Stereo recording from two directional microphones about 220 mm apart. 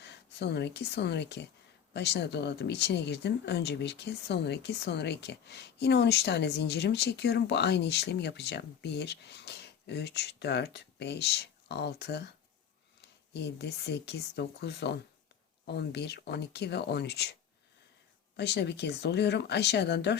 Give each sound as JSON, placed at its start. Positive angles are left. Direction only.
{"t": 0.0, "sound": "speech", "side_deg": 50}
{"t": 13.3, "sound": "speech", "side_deg": 50}
{"t": 18.3, "sound": "speech", "side_deg": 50}